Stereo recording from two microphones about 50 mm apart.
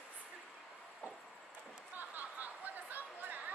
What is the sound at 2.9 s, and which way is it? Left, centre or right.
Chatter, right.